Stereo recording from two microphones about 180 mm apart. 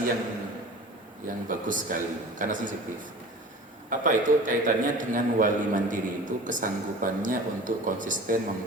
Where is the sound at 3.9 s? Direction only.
50° right (ahead or behind).